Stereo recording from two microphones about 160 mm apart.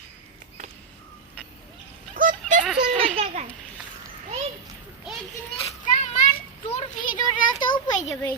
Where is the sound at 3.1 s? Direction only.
45° right (ahead or behind).